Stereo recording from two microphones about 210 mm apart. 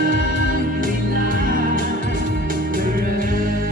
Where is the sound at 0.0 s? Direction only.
40° right (ahead or behind).